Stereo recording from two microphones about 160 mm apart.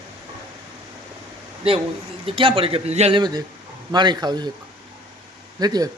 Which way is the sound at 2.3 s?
35° right (ahead or behind).